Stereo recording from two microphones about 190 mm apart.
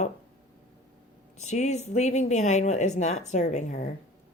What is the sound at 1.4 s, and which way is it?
Speech, 35° left (ahead or behind).